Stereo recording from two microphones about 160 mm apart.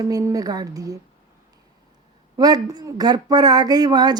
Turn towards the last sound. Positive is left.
turn(degrees=-25)  # may be behind; listen again after turning